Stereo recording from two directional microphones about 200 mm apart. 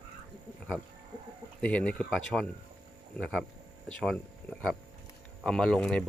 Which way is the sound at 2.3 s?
5° right (ahead or behind).